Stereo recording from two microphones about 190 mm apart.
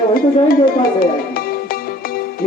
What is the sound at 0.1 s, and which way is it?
Speech, 50° left (ahead or behind).